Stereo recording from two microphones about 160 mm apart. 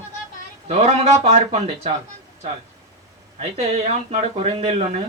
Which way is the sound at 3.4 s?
40° right (ahead or behind).